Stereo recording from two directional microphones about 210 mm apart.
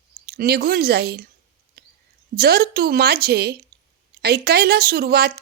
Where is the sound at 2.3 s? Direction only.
45° right (ahead or behind).